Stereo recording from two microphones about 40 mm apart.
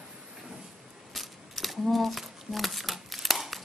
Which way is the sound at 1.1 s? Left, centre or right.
Centre.